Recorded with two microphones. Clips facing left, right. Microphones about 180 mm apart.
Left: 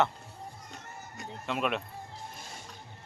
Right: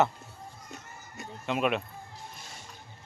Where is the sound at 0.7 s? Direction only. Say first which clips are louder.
Left 1 dB; centre (ahead or behind).